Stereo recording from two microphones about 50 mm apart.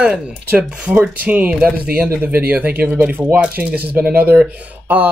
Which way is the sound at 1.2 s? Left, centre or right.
Right.